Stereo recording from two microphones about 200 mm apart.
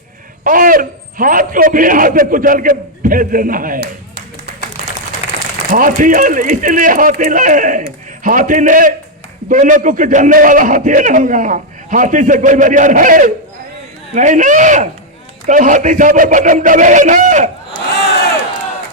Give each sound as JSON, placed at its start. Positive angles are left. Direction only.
{"t": 0.4, "sound": "a man's voice", "side_deg": -45}
{"t": 5.7, "sound": "a man's voice", "side_deg": -45}